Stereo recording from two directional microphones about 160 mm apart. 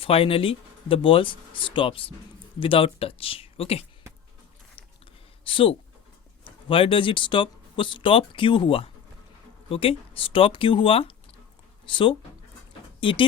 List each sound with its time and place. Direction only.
0.0 s speech: 35° left (ahead or behind)
5.5 s speech: 35° left (ahead or behind)